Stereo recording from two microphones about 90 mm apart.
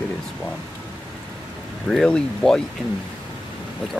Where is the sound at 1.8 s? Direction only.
10° left (ahead or behind).